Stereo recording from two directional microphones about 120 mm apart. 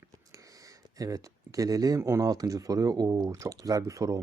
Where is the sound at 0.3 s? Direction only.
30° right (ahead or behind).